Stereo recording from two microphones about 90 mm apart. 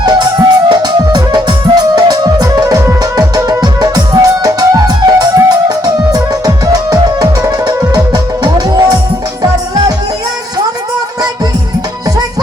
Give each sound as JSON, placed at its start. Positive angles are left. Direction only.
{"t": 0.0, "sound": "music", "side_deg": -50}